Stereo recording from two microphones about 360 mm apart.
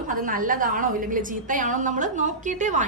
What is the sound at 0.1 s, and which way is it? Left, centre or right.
A woman's voice, right.